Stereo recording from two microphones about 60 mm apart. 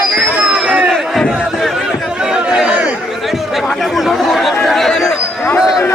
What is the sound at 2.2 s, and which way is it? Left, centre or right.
Chatter, centre.